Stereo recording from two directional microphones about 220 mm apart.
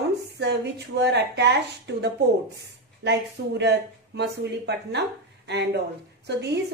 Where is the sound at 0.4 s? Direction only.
50° right (ahead or behind).